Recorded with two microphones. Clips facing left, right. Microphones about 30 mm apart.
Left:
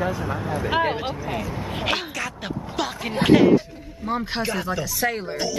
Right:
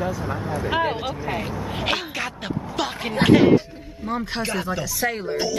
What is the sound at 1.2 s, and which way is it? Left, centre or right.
Speech, right.